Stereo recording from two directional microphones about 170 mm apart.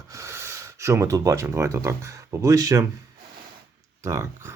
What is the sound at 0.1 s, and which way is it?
Speech, 15° right (ahead or behind).